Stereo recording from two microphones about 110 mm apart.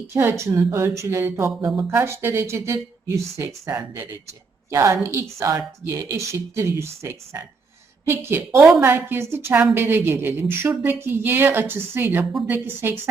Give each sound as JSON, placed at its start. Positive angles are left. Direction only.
{"t": 0.1, "sound": "a woman's voice", "side_deg": -25}
{"t": 4.7, "sound": "a woman's voice", "side_deg": -25}